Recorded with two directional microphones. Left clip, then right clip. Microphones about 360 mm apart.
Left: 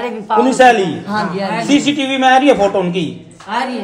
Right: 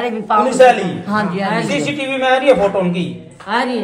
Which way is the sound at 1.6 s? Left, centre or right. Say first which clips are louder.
Left 4 dB; centre.